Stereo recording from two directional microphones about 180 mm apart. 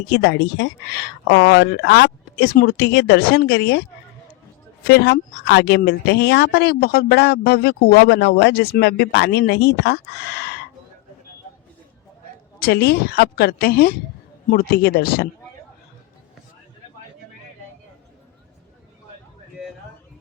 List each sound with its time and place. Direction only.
0.1 s speech: 75° left (ahead or behind)
4.9 s speech: 65° left (ahead or behind)
12.5 s speech: 60° left (ahead or behind)